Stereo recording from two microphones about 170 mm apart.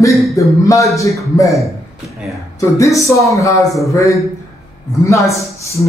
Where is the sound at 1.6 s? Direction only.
Centre (ahead or behind).